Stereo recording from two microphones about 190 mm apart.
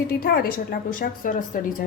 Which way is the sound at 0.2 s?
55° left (ahead or behind).